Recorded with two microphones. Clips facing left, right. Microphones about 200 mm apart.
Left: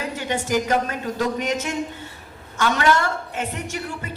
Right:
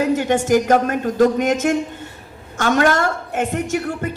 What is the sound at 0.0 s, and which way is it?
A woman's voice, 50° right (ahead or behind).